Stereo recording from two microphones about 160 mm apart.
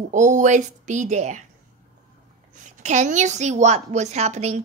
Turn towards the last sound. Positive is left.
turn(degrees=-45)  # may be behind; listen again after turning